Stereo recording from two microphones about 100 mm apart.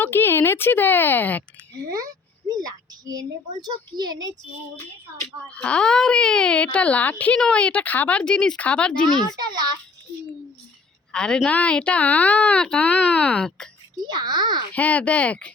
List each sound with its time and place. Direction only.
0.0 s speech: 20° left (ahead or behind)
2.6 s a woman's voice: 40° right (ahead or behind)
5.5 s a woman's voice: 10° left (ahead or behind)
9.4 s a child's voice: 45° right (ahead or behind)
11.1 s a woman's voice: 10° left (ahead or behind)
14.0 s a child's voice: 45° right (ahead or behind)
14.7 s a woman's voice: 15° left (ahead or behind)